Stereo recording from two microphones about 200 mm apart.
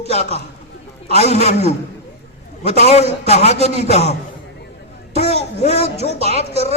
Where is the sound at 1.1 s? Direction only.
30° left (ahead or behind).